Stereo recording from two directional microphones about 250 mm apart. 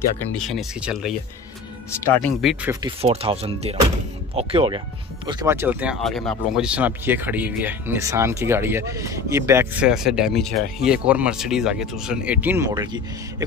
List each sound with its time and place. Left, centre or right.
0.5 s speech: centre
2.2 s speech: centre
2.7 s speech: centre